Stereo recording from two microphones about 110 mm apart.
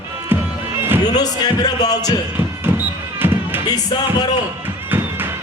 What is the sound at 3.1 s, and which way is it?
Basketball bounce, 20° right (ahead or behind).